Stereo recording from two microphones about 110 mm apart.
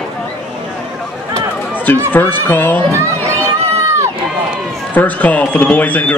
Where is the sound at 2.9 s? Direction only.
25° right (ahead or behind).